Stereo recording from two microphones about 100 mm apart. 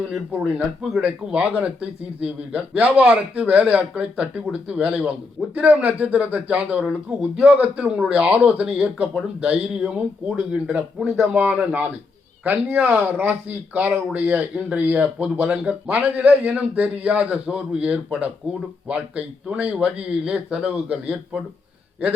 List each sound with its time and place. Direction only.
0.3 s a man's voice: 10° right (ahead or behind)